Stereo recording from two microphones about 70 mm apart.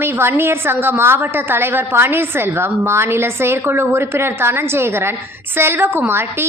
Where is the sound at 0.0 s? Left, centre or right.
Right.